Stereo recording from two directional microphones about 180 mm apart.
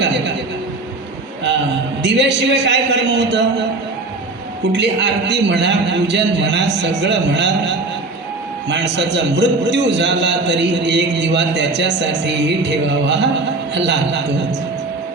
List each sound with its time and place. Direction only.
0.0 s a sound: 75° right (ahead or behind)
2.0 s a man's voice: 75° right (ahead or behind)
4.7 s a man's voice: 75° right (ahead or behind)